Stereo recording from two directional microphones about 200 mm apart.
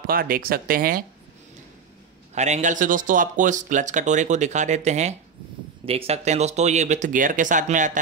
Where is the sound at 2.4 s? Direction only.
35° right (ahead or behind).